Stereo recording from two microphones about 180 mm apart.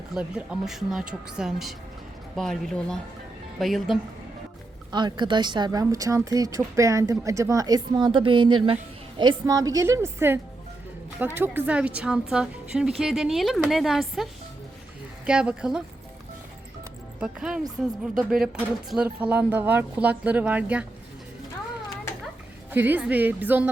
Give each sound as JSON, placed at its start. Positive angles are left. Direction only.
{"t": 0.1, "sound": "a woman's voice", "side_deg": -5}
{"t": 4.9, "sound": "a woman's voice", "side_deg": -25}
{"t": 15.3, "sound": "a woman's voice", "side_deg": -5}
{"t": 17.2, "sound": "a woman's voice", "side_deg": -5}
{"t": 22.7, "sound": "speech", "side_deg": -10}